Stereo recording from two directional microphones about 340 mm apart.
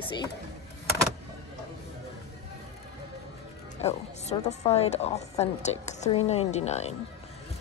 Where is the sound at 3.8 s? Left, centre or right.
Centre.